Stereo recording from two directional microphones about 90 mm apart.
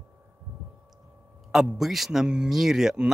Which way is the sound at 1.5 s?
5° right (ahead or behind).